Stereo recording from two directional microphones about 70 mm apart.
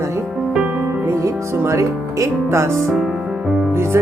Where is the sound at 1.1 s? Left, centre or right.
Right.